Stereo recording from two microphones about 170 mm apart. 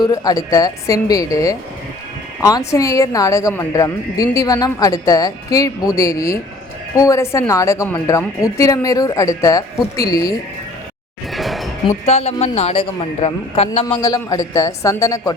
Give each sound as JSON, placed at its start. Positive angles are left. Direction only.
{"t": 0.0, "sound": "a woman's voice", "side_deg": 20}
{"t": 11.3, "sound": "a sound", "side_deg": 0}
{"t": 12.0, "sound": "a man's voice", "side_deg": 40}
{"t": 14.0, "sound": "a woman's voice", "side_deg": 20}